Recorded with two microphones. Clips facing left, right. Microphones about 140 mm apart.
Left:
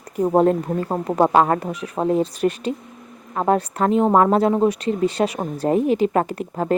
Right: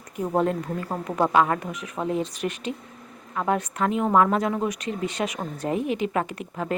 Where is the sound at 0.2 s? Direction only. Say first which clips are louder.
Left 7 dB; 40° left (ahead or behind).